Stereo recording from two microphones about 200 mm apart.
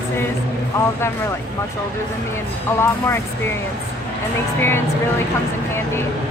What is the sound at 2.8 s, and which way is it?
Speech, 15° left (ahead or behind).